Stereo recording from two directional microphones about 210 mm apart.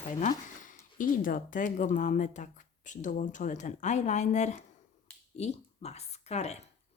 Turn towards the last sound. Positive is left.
turn(degrees=30)  # may be behind; listen again after turning